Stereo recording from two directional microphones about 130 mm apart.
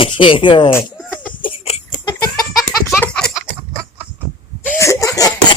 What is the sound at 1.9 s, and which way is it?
Chicken, 35° left (ahead or behind).